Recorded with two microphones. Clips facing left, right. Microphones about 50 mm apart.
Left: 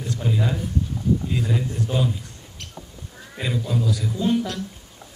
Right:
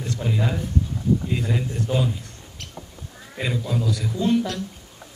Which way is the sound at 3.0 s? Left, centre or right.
Right.